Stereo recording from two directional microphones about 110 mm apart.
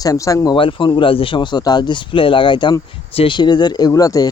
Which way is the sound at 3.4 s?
40° left (ahead or behind).